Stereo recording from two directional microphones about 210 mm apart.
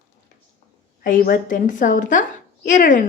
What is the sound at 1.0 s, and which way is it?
A woman's voice, 40° left (ahead or behind).